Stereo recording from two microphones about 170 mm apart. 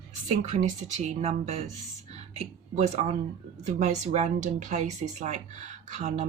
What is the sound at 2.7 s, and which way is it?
A woman's voice, 40° right (ahead or behind).